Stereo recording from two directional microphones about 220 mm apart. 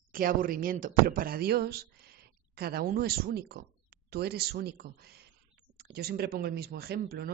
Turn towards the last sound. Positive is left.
turn(degrees=-45)  # may be behind; listen again after turning